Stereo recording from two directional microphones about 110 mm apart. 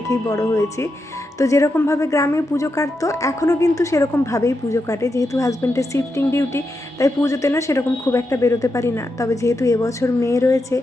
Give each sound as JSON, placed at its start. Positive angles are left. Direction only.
{"t": 0.1, "sound": "a woman's voice", "side_deg": 30}